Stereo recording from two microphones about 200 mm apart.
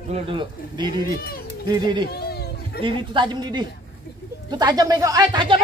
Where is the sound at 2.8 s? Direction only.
25° right (ahead or behind).